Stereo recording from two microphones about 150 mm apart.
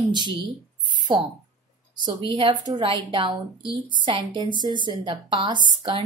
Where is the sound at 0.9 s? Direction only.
35° right (ahead or behind).